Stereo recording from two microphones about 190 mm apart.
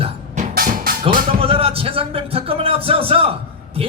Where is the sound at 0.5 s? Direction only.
50° right (ahead or behind).